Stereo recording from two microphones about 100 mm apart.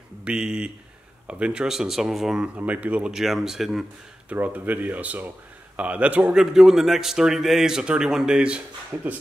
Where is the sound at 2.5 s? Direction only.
15° right (ahead or behind).